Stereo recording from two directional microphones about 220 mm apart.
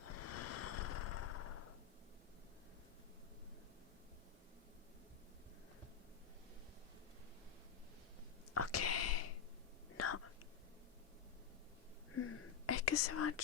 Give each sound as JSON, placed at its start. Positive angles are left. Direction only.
{"t": 0.0, "sound": "vehicle", "side_deg": 90}
{"t": 8.5, "sound": "a sound", "side_deg": 90}
{"t": 12.1, "sound": "whispering", "side_deg": 75}